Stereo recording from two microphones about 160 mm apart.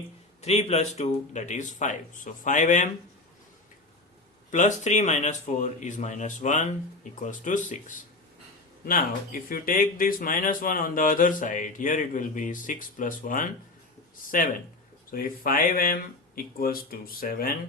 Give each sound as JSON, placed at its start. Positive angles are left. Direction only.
{"t": 0.4, "sound": "speech", "side_deg": 40}
{"t": 4.5, "sound": "speech", "side_deg": 45}